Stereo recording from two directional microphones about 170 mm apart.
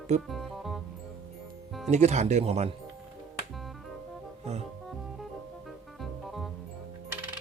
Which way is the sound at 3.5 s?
Centre (ahead or behind).